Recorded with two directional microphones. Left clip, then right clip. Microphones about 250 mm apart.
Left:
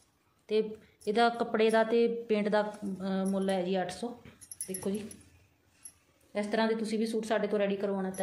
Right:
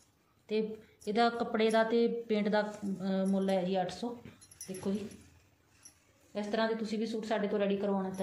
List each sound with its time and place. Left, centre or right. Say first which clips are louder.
0.5 s a woman's voice: left 4 dB; left
6.3 s a woman's voice: left 3 dB; left